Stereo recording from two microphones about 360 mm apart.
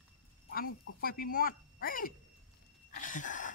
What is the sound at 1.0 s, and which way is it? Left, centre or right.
Speech, left.